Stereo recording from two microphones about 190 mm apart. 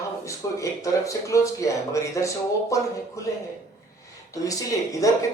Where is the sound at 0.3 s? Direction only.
15° left (ahead or behind).